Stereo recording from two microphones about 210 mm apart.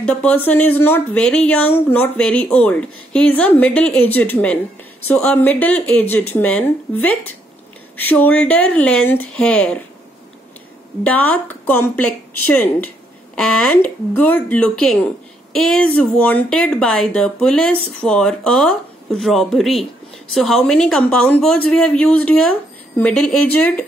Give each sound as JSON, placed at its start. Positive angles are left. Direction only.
{"t": 0.0, "sound": "a woman's voice", "side_deg": 5}
{"t": 11.1, "sound": "a woman's voice", "side_deg": 5}